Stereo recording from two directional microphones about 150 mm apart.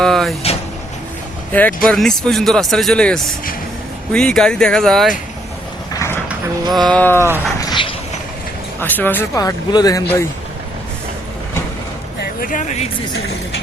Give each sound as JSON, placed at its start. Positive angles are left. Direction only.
{"t": 0.0, "sound": "vehicle", "side_deg": 0}
{"t": 1.5, "sound": "speech", "side_deg": 10}
{"t": 5.9, "sound": "a sound", "side_deg": 20}
{"t": 6.7, "sound": "speech", "side_deg": 0}
{"t": 7.0, "sound": "speech", "side_deg": 15}
{"t": 7.6, "sound": "a sound", "side_deg": 30}
{"t": 8.8, "sound": "speech", "side_deg": 15}
{"t": 9.4, "sound": "speech", "side_deg": 25}
{"t": 12.2, "sound": "speech", "side_deg": 70}